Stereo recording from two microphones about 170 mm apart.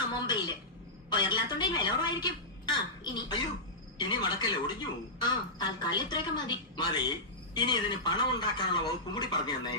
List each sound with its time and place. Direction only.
0.1 s a woman's voice: 25° left (ahead or behind)